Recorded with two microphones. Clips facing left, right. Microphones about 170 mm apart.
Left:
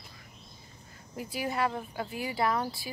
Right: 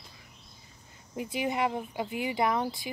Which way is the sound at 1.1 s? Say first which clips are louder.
Right 3 dB; 20° right (ahead or behind).